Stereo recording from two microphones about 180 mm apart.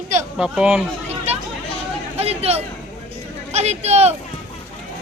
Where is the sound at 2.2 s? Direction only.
35° right (ahead or behind).